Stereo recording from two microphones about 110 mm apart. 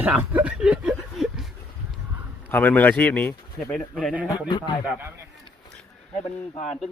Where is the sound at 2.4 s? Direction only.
15° left (ahead or behind).